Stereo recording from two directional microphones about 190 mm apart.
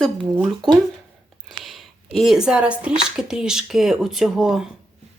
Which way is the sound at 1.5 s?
Centre (ahead or behind).